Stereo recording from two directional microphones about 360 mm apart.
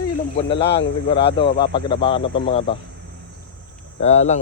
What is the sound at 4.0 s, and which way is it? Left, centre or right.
Speech, centre.